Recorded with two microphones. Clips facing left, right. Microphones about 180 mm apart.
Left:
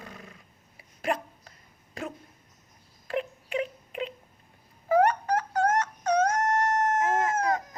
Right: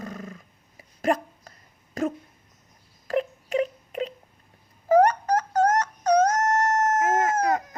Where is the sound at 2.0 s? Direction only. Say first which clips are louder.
Right 10 dB; 45° right (ahead or behind).